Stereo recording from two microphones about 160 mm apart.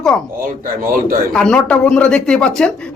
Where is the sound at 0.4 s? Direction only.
60° right (ahead or behind).